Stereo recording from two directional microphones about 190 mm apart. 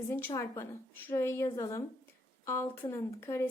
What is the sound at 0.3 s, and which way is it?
A woman's voice, 15° left (ahead or behind).